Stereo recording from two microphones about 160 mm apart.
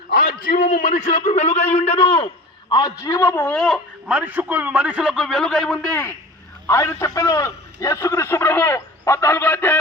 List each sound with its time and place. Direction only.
0.4 s a man's voice: 55° left (ahead or behind); by 3.4 s 20° left (ahead or behind)
3.4 s speech: 5° left (ahead or behind)
4.1 s a man's voice: 10° right (ahead or behind)
6.7 s a man's voice: 20° left (ahead or behind)